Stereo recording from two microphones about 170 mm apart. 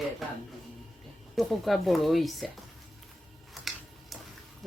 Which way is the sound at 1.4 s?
Centre (ahead or behind).